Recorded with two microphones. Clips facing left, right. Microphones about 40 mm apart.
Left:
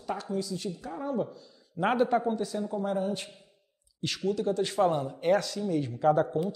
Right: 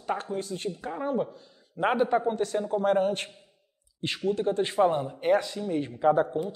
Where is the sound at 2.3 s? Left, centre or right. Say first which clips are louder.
Right 4 dB; right.